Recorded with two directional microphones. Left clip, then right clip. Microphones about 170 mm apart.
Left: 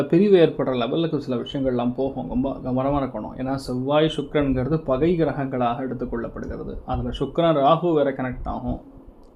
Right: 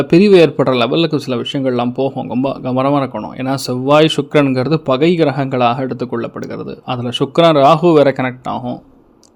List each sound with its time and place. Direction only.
0.0 s speech: 35° right (ahead or behind)